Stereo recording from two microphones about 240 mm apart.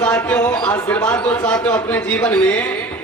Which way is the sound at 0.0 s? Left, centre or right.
Centre.